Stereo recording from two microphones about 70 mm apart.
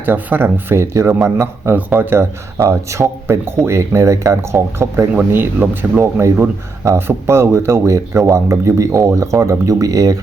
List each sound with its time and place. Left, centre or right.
0.0 s speech: right
1.7 s speech: right
2.6 s speech: right
5.3 s speech: right